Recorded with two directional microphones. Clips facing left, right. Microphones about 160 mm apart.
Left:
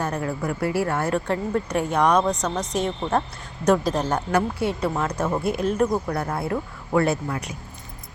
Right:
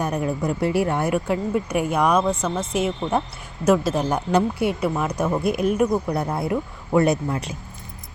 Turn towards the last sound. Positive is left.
turn(degrees=-25)  # may be behind; listen again after turning